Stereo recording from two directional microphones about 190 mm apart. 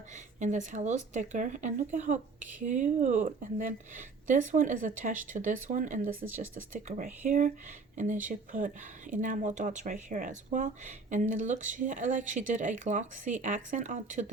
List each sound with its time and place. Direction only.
0.3 s speech: 40° right (ahead or behind)
6.1 s speech: 10° right (ahead or behind)
6.7 s speech: 40° right (ahead or behind)